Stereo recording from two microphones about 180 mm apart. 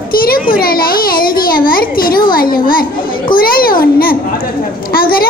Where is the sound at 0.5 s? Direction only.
55° left (ahead or behind).